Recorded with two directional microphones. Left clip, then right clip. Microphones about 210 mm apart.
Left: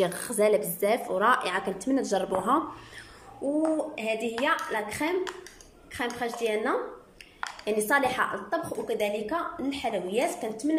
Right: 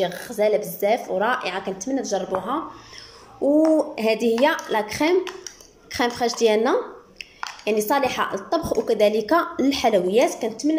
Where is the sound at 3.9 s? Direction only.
25° right (ahead or behind).